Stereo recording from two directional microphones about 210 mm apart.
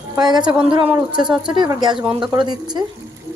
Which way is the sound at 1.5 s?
20° right (ahead or behind).